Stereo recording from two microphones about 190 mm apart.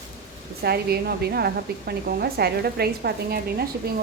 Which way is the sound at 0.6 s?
55° right (ahead or behind).